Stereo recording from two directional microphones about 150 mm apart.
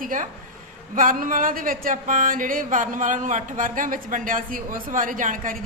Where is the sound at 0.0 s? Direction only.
60° right (ahead or behind).